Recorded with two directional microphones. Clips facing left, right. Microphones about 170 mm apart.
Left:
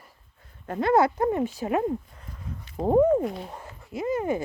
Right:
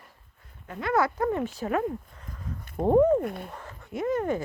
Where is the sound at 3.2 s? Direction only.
55° right (ahead or behind).